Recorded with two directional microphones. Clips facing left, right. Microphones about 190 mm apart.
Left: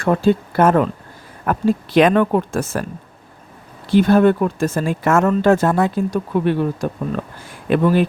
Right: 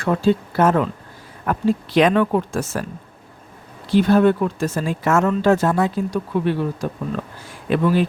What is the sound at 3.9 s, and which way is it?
Speech, 50° left (ahead or behind).